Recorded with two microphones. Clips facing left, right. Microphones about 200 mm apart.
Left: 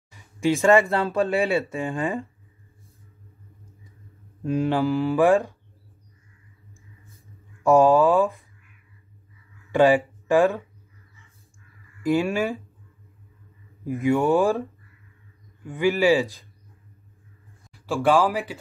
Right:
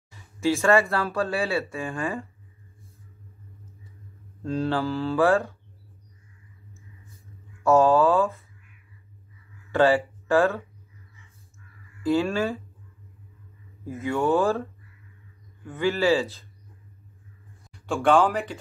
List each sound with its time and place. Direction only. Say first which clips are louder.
0.1 s speech: left 2 dB; 15° left (ahead or behind)
4.4 s speech: left 3 dB; 15° left (ahead or behind)
7.6 s speech: left 2 dB; 15° left (ahead or behind)
9.7 s speech: left 2 dB; 15° left (ahead or behind)
12.0 s speech: left 1 dB; 15° left (ahead or behind)
13.8 s speech: left 4 dB; 15° left (ahead or behind)
17.6 s speech: left 1 dB; 5° left (ahead or behind)